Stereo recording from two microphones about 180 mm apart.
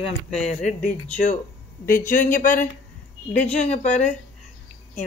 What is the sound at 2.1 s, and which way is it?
Speech, 50° left (ahead or behind).